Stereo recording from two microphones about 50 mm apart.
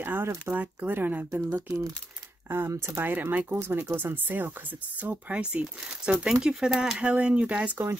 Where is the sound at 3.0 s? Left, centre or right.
Right.